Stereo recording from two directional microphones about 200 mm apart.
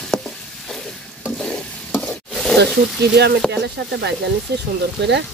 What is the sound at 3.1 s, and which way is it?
Speech, 55° right (ahead or behind).